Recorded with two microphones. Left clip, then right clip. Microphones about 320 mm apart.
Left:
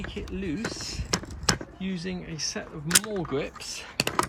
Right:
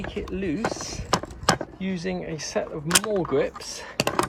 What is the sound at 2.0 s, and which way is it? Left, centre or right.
Speech, centre.